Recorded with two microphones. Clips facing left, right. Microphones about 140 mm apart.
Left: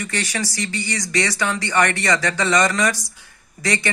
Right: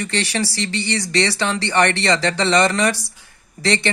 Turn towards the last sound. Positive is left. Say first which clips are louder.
# right 3 dB
turn(degrees=-30)  # may be behind; listen again after turning